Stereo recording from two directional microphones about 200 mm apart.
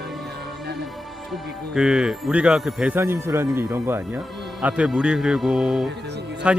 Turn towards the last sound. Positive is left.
turn(degrees=-5)  # may be behind; listen again after turning